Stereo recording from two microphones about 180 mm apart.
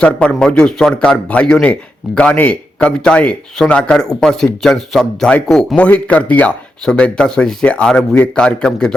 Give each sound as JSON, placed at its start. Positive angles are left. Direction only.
{"t": 0.0, "sound": "speech", "side_deg": 5}